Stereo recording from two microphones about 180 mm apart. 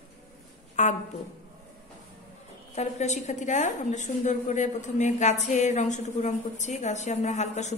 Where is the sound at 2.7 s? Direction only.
40° left (ahead or behind).